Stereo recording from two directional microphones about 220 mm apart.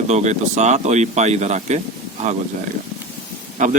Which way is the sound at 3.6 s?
35° right (ahead or behind).